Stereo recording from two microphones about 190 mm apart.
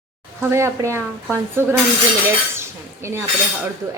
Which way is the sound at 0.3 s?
15° right (ahead or behind).